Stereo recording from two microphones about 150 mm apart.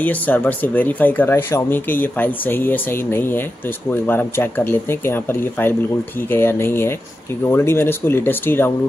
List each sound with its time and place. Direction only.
0.0 s speech: 10° left (ahead or behind)